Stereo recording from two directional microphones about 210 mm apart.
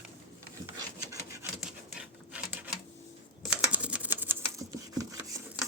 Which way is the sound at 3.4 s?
5° right (ahead or behind).